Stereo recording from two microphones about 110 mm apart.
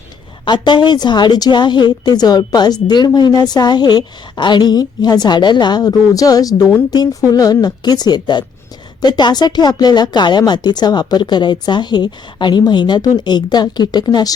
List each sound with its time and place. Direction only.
0.4 s speech: 45° left (ahead or behind)